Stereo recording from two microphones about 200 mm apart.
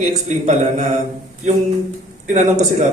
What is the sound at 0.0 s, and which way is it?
Speech, 35° right (ahead or behind).